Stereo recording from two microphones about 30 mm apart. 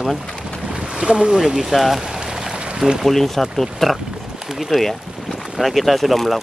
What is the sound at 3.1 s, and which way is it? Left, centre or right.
Speech, centre.